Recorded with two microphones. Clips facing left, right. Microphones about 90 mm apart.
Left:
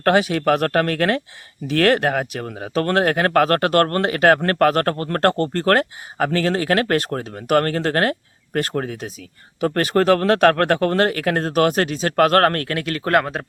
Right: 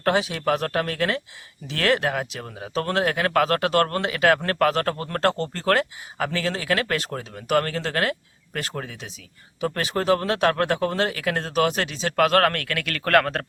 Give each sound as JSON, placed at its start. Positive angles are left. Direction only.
{"t": 0.0, "sound": "speech", "side_deg": 60}